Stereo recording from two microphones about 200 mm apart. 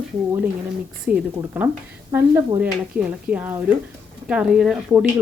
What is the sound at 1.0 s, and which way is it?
A woman's voice, 5° right (ahead or behind).